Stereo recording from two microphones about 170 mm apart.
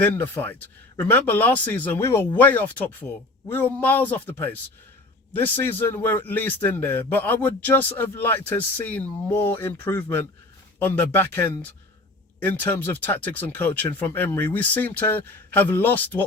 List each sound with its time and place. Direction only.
0.0 s a man's voice: 10° left (ahead or behind)